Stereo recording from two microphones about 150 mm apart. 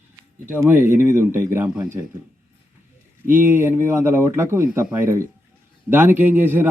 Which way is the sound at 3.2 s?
15° right (ahead or behind).